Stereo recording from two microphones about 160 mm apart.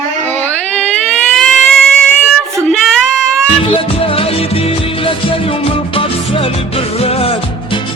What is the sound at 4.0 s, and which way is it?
Music, 35° left (ahead or behind).